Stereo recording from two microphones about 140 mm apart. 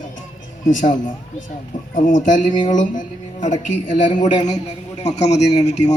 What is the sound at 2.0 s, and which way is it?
A man's voice, 65° left (ahead or behind).